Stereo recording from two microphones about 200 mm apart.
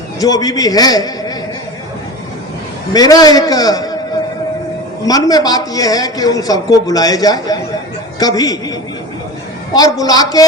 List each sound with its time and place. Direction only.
0.2 s a man's voice: 20° left (ahead or behind)
2.9 s a man's voice: 20° left (ahead or behind)
5.0 s a man's voice: 20° left (ahead or behind)
9.7 s a man's voice: 20° left (ahead or behind)